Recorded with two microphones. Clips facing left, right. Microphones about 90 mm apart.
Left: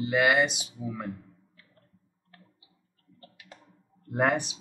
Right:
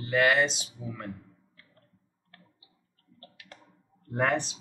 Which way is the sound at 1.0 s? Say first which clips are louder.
Left 2 dB; 5° left (ahead or behind).